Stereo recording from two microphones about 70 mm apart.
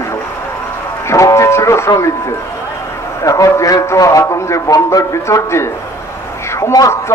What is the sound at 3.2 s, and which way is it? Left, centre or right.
A man's voice, left.